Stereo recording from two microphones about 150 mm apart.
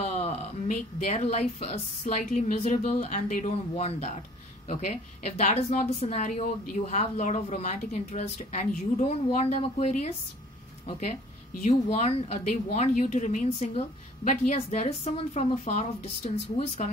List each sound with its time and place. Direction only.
0.0 s a sound: 45° left (ahead or behind)
0.7 s a woman's voice: 55° left (ahead or behind)
3.7 s a woman's voice: 45° left (ahead or behind)